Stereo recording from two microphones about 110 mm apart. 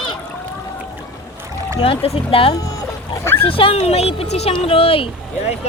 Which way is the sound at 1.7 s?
60° left (ahead or behind).